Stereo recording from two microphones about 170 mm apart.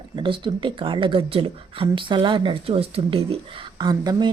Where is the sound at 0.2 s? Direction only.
30° right (ahead or behind).